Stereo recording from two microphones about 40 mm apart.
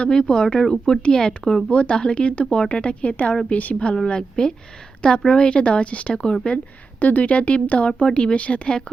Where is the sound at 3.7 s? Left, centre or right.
Left.